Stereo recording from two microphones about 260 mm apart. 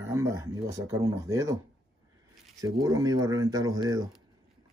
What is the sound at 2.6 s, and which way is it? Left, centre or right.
Speech, centre.